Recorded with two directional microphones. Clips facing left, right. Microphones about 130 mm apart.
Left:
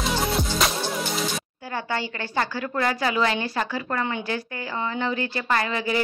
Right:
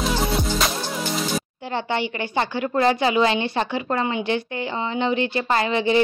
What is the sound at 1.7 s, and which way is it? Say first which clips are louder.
A woman's voice: right 4 dB; 20° right (ahead or behind).